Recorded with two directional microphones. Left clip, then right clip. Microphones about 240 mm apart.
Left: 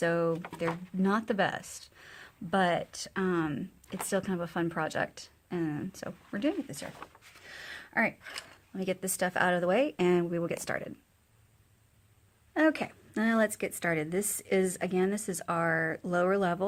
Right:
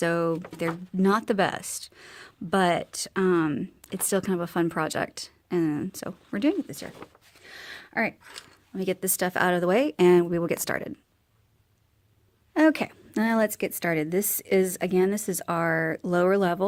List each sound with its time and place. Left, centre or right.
0.0 s speech: right
7.4 s a sound: right
8.7 s speech: right
12.5 s speech: right